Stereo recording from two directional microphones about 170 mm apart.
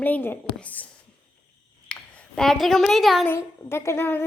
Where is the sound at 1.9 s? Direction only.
5° left (ahead or behind).